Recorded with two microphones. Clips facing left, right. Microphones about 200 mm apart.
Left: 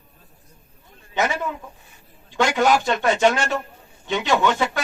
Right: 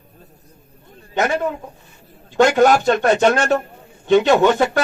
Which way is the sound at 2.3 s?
50° right (ahead or behind).